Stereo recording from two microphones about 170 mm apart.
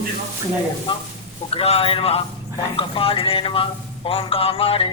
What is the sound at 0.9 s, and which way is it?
A man's voice, 30° left (ahead or behind).